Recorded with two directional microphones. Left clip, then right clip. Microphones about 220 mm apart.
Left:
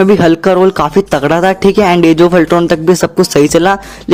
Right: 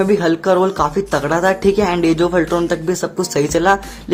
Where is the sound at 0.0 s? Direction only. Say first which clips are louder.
Left 7 dB; 35° left (ahead or behind).